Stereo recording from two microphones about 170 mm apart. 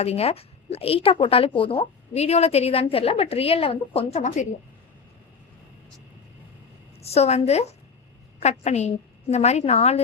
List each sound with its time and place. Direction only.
0.0 s speech: 35° left (ahead or behind)
7.0 s speech: 40° left (ahead or behind)